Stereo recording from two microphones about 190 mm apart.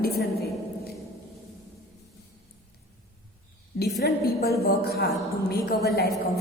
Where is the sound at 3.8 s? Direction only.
60° left (ahead or behind).